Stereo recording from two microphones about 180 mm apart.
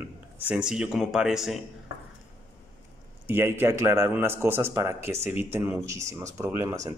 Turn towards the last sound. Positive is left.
turn(degrees=-15)  # may be behind; listen again after turning